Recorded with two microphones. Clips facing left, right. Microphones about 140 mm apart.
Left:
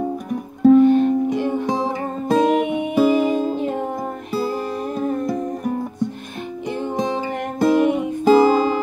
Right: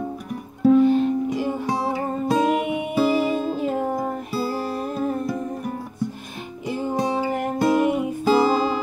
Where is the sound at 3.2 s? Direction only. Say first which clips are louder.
Left 4 dB; 15° left (ahead or behind).